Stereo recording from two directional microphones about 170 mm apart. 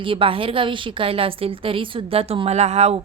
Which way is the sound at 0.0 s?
30° right (ahead or behind).